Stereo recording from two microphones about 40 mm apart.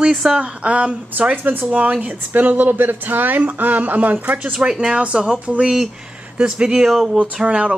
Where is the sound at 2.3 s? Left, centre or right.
Right.